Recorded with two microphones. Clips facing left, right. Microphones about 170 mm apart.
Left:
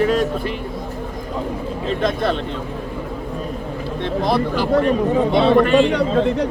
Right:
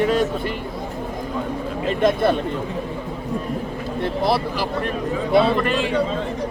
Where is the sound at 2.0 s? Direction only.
10° right (ahead or behind).